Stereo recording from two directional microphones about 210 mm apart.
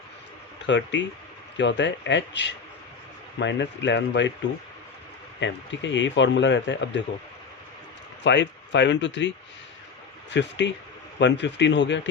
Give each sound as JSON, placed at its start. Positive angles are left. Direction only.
{"t": 0.7, "sound": "speech", "side_deg": 60}
{"t": 5.4, "sound": "speech", "side_deg": 60}
{"t": 8.2, "sound": "speech", "side_deg": 55}
{"t": 10.3, "sound": "speech", "side_deg": 55}